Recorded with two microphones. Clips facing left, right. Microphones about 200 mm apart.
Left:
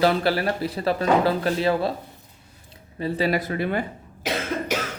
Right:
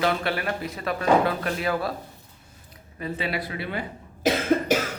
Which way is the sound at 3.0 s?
35° left (ahead or behind).